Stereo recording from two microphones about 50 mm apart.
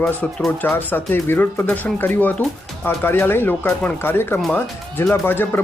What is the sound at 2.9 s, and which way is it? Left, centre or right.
Speech, left.